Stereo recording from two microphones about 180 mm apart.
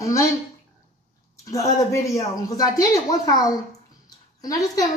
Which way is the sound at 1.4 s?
20° left (ahead or behind).